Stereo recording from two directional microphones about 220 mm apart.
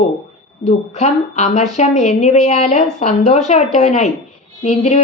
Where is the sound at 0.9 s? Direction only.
30° left (ahead or behind).